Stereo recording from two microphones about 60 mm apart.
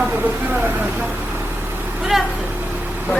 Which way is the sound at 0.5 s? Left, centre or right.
Right.